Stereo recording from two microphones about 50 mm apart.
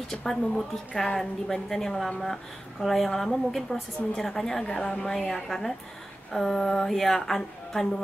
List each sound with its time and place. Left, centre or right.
0.1 s a woman's voice: centre
4.6 s a woman's voice: centre